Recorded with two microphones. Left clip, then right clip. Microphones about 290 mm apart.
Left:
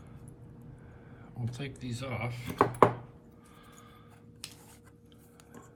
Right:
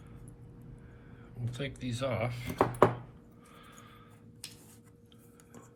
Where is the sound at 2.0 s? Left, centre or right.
Centre.